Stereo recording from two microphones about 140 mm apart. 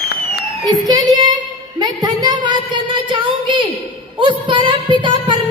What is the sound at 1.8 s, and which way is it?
Music, 30° right (ahead or behind).